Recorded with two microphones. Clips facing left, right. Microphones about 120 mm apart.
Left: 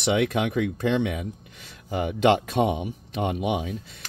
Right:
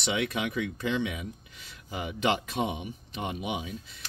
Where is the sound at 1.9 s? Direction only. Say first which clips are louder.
Left 8 dB; 65° left (ahead or behind).